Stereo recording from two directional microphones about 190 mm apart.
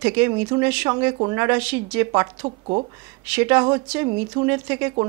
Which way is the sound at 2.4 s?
30° right (ahead or behind).